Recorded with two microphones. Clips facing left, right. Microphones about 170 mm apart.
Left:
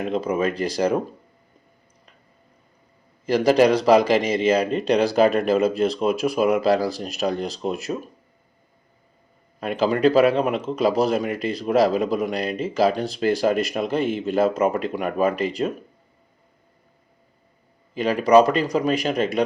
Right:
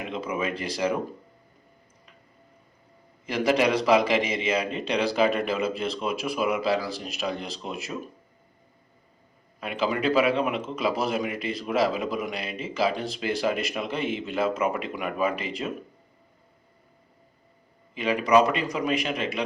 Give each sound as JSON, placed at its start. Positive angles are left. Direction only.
{"t": 0.0, "sound": "speech", "side_deg": 40}
{"t": 3.3, "sound": "speech", "side_deg": 40}
{"t": 9.6, "sound": "speech", "side_deg": 40}
{"t": 17.9, "sound": "speech", "side_deg": 40}